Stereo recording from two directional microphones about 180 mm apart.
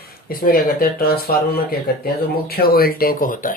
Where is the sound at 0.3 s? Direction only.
55° left (ahead or behind).